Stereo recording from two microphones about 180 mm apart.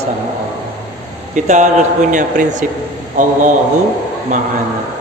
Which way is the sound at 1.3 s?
45° right (ahead or behind).